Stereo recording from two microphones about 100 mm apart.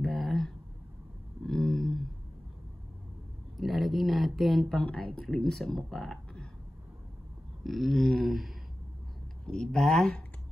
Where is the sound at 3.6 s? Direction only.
Centre (ahead or behind).